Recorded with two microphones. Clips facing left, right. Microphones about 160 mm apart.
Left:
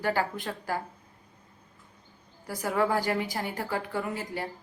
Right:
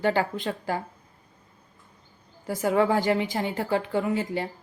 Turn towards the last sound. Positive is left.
turn(degrees=-25)  # may be behind; listen again after turning